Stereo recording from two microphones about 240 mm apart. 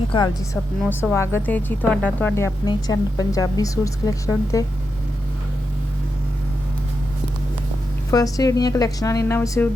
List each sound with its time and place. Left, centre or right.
0.1 s a woman's voice: left
0.8 s a woman's voice: centre
8.1 s speech: centre